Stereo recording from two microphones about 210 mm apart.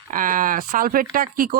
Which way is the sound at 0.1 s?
40° right (ahead or behind).